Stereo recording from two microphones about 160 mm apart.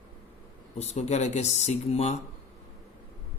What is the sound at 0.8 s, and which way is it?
Speech, 45° left (ahead or behind).